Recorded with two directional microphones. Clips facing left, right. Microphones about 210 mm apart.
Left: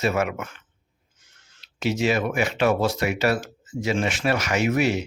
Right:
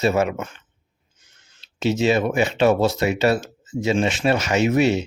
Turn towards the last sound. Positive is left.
turn(degrees=-25)  # may be behind; listen again after turning